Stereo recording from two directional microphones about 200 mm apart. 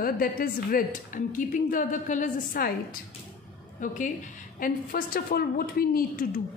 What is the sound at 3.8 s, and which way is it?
A woman's voice, 40° left (ahead or behind).